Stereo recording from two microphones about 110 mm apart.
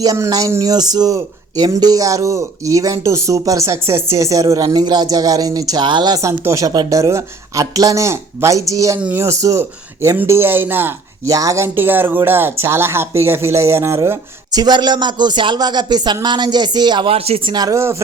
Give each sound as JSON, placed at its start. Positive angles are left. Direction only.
{"t": 0.0, "sound": "speech", "side_deg": -35}
{"t": 6.2, "sound": "a woman's voice", "side_deg": -30}
{"t": 11.3, "sound": "speech", "side_deg": -30}
{"t": 11.8, "sound": "a woman's voice", "side_deg": -20}
{"t": 14.5, "sound": "speech", "side_deg": -40}
{"t": 17.1, "sound": "speech", "side_deg": -60}
{"t": 17.5, "sound": "speech", "side_deg": -40}